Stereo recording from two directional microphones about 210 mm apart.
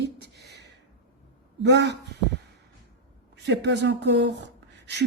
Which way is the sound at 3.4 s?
55° right (ahead or behind).